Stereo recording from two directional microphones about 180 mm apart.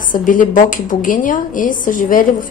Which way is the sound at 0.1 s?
50° left (ahead or behind).